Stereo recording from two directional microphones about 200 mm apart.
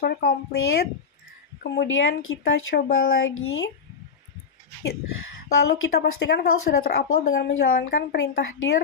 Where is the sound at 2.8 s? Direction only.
50° left (ahead or behind).